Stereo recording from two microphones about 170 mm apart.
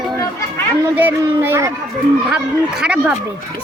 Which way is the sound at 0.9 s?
10° right (ahead or behind).